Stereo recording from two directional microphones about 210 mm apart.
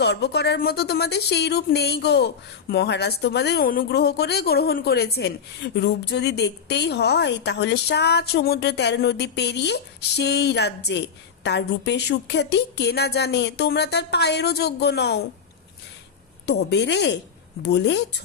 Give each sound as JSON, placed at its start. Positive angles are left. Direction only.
{"t": 0.0, "sound": "speech", "side_deg": 50}
{"t": 16.5, "sound": "a woman's voice", "side_deg": 55}